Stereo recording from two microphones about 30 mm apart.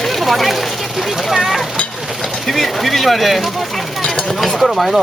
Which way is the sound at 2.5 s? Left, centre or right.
Centre.